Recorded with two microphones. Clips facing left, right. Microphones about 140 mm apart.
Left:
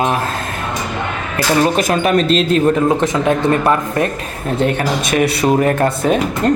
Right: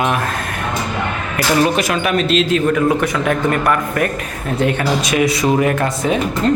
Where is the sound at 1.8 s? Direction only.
45° left (ahead or behind).